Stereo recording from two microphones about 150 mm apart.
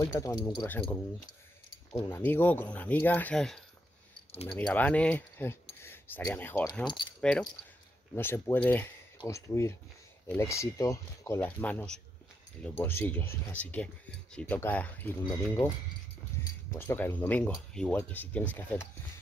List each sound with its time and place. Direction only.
0.0 s speech: 20° left (ahead or behind)
1.9 s speech: 15° left (ahead or behind)
6.9 s speech: 30° left (ahead or behind)
7.2 s speech: 5° left (ahead or behind)
16.3 s a sound: 15° left (ahead or behind)
16.7 s speech: 15° left (ahead or behind)